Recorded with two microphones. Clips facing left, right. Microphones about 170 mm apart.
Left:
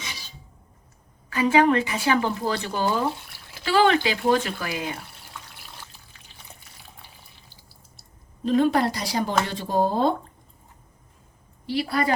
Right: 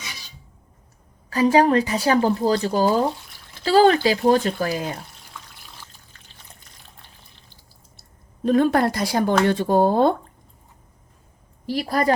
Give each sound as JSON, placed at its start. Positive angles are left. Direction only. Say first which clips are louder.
{"t": 1.3, "sound": "speech", "louder": "right 3 dB", "side_deg": -35}
{"t": 8.4, "sound": "speech", "louder": "right 3 dB", "side_deg": -50}
{"t": 11.6, "sound": "speech", "louder": "right 3 dB", "side_deg": -45}